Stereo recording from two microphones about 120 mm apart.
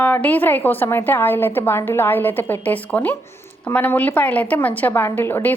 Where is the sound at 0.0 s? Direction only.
15° left (ahead or behind).